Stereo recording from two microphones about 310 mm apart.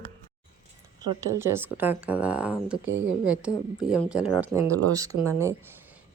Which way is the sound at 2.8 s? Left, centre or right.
Right.